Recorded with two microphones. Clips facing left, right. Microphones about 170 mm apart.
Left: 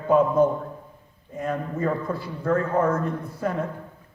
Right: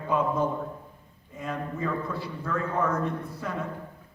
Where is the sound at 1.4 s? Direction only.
45° left (ahead or behind).